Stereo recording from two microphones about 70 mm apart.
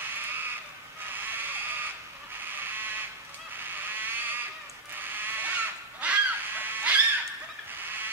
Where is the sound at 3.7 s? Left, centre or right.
Right.